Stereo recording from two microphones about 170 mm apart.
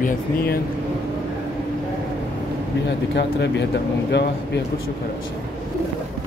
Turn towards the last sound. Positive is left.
turn(degrees=90)